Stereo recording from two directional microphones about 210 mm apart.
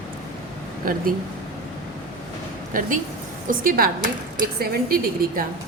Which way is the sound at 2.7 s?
40° right (ahead or behind).